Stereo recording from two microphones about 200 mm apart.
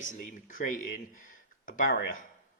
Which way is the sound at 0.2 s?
45° left (ahead or behind).